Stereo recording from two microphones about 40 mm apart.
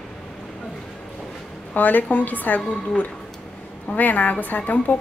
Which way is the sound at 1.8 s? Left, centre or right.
Left.